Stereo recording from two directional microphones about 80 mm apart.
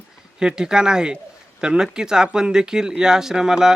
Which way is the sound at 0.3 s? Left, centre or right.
Centre.